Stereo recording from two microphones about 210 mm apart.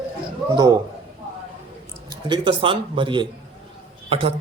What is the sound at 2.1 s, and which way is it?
A man's voice, 20° right (ahead or behind).